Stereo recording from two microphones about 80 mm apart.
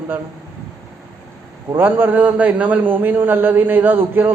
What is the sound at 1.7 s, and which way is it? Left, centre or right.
A man's voice, right.